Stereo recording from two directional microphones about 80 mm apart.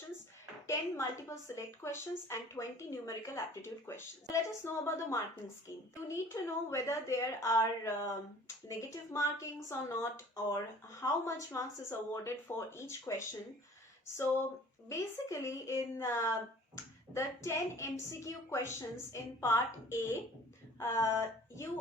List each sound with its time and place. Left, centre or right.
0.7 s a woman's voice: left
14.8 s a woman's voice: left